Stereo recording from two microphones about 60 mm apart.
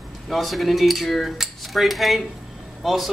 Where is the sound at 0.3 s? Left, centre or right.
Centre.